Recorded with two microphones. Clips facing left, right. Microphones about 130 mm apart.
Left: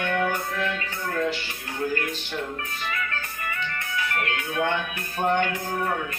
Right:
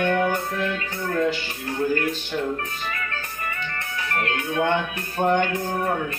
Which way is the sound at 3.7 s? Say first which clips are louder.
Even; 35° right (ahead or behind).